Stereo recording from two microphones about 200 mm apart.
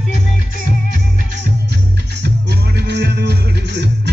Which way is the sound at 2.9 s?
55° right (ahead or behind).